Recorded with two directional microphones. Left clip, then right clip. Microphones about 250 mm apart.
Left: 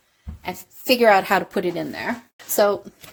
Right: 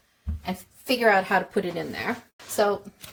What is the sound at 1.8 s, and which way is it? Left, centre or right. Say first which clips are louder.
Speech: left 3 dB; left.